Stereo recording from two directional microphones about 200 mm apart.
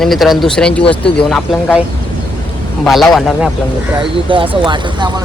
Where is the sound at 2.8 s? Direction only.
Centre (ahead or behind).